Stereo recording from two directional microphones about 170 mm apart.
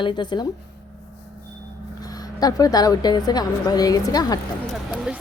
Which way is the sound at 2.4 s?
20° left (ahead or behind).